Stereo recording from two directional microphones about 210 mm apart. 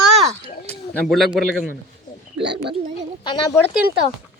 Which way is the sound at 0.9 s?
Centre (ahead or behind).